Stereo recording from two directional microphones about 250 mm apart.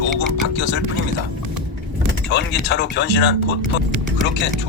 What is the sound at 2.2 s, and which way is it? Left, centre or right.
Speech, left.